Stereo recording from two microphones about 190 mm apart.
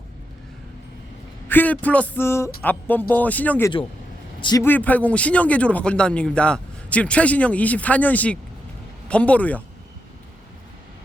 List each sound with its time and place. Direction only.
1.5 s speech: 10° left (ahead or behind)
4.4 s a sound: 25° left (ahead or behind)
4.6 s speech: 10° left (ahead or behind)